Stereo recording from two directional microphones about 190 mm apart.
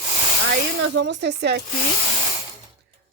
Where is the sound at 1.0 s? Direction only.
65° right (ahead or behind).